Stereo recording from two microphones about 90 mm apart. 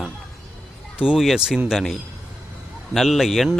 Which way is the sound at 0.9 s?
10° right (ahead or behind).